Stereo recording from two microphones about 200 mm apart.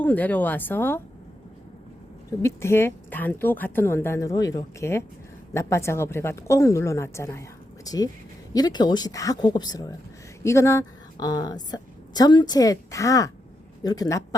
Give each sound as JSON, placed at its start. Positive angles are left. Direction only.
{"t": 0.0, "sound": "speech", "side_deg": 10}
{"t": 2.4, "sound": "a woman's voice", "side_deg": 15}